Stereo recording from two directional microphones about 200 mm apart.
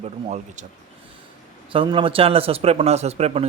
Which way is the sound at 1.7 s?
25° right (ahead or behind).